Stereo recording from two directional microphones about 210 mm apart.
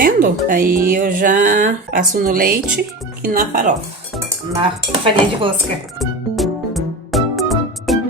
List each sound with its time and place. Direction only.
0.0 s speech: 40° right (ahead or behind)
5.0 s speech: 25° right (ahead or behind)
6.0 s music: centre (ahead or behind)